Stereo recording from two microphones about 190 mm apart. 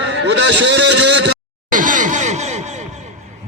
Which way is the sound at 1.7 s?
45° right (ahead or behind).